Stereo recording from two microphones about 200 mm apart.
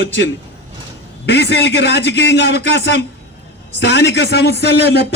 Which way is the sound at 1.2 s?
55° left (ahead or behind).